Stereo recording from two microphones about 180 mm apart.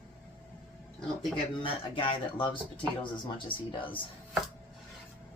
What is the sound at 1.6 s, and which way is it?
Speech, 30° left (ahead or behind).